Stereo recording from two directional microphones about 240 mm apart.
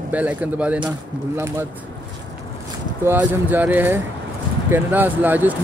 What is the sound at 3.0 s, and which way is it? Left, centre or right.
Speech, centre.